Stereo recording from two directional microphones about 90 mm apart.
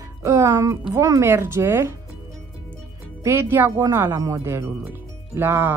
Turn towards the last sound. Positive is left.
turn(degrees=-25)  # may be behind; listen again after turning